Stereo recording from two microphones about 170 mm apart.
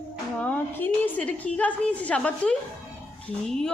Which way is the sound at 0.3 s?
10° left (ahead or behind).